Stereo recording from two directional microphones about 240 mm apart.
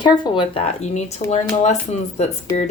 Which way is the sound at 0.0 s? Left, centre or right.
Left.